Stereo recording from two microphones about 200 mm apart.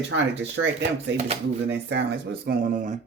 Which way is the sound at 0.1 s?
60° right (ahead or behind).